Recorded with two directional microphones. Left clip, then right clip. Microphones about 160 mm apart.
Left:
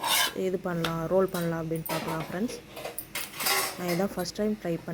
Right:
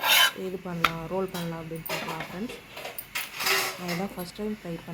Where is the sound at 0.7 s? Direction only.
25° left (ahead or behind).